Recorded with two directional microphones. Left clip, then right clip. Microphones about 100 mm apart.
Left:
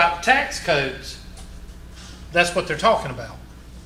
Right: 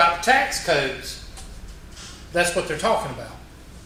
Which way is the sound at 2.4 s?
45° left (ahead or behind).